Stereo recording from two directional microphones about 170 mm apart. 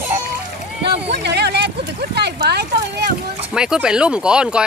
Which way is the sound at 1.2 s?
80° right.